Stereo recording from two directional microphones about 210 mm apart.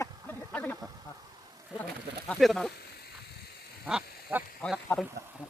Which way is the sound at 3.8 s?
5° right (ahead or behind).